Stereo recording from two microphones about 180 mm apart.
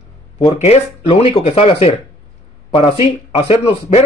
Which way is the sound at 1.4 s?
35° left (ahead or behind).